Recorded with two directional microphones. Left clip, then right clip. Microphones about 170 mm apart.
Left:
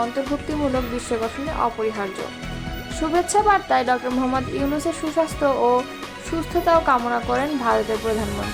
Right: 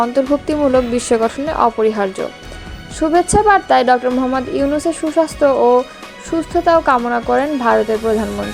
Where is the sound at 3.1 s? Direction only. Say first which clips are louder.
Right 6 dB; 30° right (ahead or behind).